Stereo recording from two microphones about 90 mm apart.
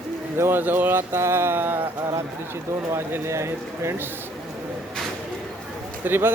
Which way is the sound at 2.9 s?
30° right (ahead or behind).